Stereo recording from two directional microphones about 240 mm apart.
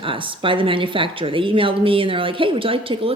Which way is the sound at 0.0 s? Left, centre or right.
Right.